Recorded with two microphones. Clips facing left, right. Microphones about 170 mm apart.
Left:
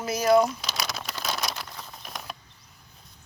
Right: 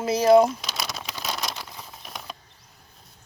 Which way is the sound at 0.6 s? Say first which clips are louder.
Even; centre (ahead or behind).